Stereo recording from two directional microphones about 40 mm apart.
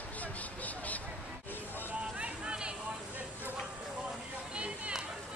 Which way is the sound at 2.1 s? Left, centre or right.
Right.